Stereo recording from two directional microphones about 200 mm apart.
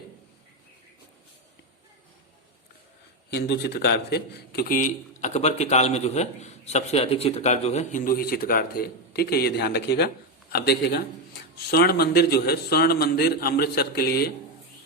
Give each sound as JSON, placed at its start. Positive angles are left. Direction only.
{"t": 3.2, "sound": "a man's voice", "side_deg": 55}